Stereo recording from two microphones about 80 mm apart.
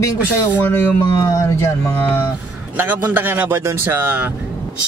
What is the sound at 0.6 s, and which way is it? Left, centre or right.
Speech, left.